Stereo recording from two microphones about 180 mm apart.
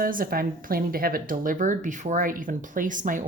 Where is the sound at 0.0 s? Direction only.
50° right (ahead or behind).